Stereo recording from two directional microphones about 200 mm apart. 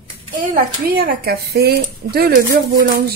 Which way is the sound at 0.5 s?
45° right (ahead or behind).